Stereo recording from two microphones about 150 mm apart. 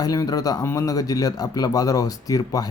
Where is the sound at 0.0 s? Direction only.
25° left (ahead or behind).